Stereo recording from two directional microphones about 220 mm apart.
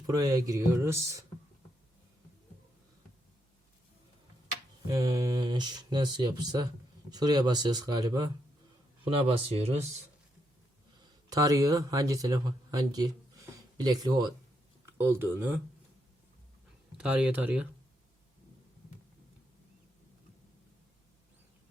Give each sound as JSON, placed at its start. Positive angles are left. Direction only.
{"t": 0.0, "sound": "speech", "side_deg": -15}
{"t": 4.9, "sound": "speech", "side_deg": -15}
{"t": 11.3, "sound": "speech", "side_deg": -15}
{"t": 17.0, "sound": "speech", "side_deg": -5}